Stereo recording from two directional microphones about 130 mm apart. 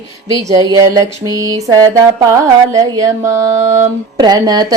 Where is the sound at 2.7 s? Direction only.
25° right (ahead or behind).